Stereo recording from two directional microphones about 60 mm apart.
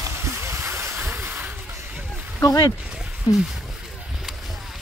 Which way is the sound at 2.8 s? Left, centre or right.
Centre.